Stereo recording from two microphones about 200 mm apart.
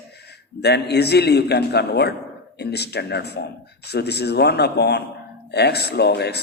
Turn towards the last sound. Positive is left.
turn(degrees=55)  # may be behind; listen again after turning